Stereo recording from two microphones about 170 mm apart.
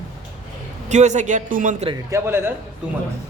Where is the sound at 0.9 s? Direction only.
45° right (ahead or behind).